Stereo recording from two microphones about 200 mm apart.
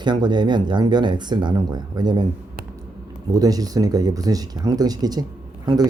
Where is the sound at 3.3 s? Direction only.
20° right (ahead or behind).